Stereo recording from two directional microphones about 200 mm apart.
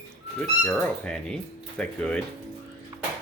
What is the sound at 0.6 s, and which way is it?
Speech, 5° left (ahead or behind).